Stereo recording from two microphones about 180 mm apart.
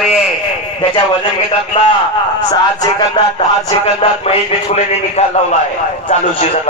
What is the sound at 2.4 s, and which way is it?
Speech, 25° left (ahead or behind).